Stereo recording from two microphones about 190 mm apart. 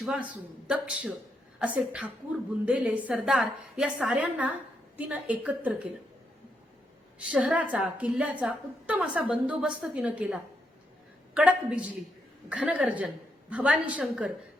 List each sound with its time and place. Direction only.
0.0 s a woman's voice: 5° right (ahead or behind)
7.2 s a woman's voice: 5° right (ahead or behind)